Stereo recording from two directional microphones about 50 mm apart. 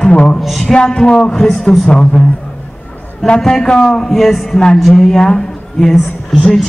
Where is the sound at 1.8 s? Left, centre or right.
Centre.